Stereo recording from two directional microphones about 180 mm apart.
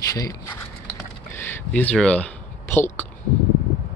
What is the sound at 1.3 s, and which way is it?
Speech, 10° left (ahead or behind).